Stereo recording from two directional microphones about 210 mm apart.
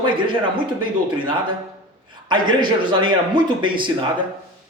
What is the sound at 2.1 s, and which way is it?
Speech, 20° right (ahead or behind).